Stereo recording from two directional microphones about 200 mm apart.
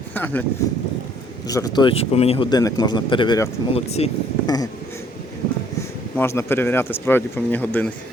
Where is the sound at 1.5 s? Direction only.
20° left (ahead or behind).